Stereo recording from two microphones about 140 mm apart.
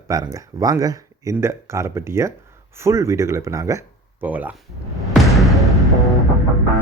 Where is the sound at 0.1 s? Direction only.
25° right (ahead or behind).